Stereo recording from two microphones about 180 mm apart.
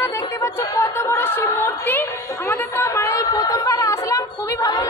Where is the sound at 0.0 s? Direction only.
15° left (ahead or behind).